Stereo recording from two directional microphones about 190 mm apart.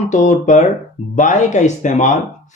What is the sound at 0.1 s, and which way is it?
Speech, 40° left (ahead or behind).